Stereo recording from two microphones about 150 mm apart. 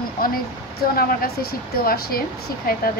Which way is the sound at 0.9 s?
85° left.